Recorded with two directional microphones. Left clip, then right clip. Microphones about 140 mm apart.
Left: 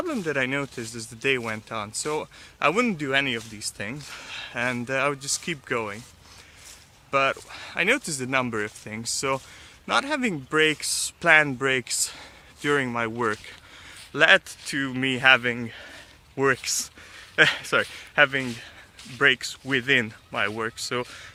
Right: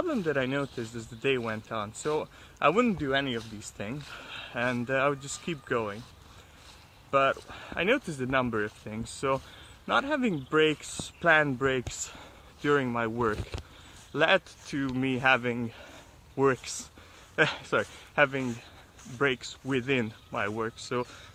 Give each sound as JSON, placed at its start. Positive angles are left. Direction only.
{"t": 0.0, "sound": "speech", "side_deg": 20}
{"t": 7.1, "sound": "speech", "side_deg": 25}